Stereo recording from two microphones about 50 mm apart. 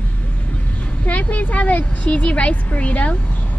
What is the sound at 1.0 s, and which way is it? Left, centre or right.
A woman's voice, left.